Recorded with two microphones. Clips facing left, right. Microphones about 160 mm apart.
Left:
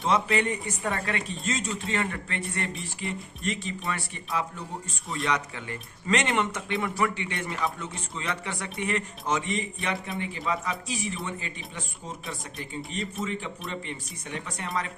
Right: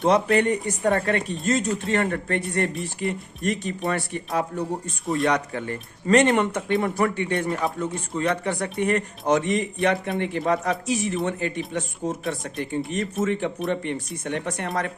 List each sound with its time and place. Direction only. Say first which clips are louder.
0.0 s a man's voice: right 6 dB; 60° right (ahead or behind)
10.9 s a man's voice: right 8 dB; 60° right (ahead or behind)